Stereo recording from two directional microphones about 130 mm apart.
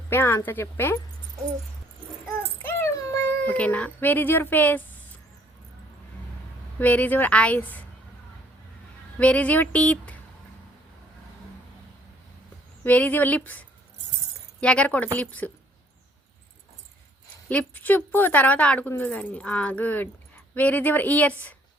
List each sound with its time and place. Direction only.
0.1 s a woman's voice: 20° left (ahead or behind)
2.6 s a sound: 15° left (ahead or behind)
6.7 s a woman's voice: 15° left (ahead or behind)
9.1 s a woman's voice: 10° left (ahead or behind)
12.8 s a woman's voice: 15° left (ahead or behind)
17.5 s a woman's voice: 10° left (ahead or behind)